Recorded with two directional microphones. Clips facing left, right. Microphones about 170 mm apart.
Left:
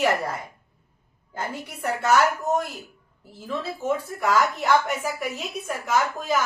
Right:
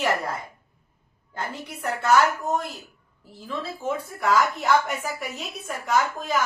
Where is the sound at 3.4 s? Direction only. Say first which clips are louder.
Left 2 dB; centre (ahead or behind).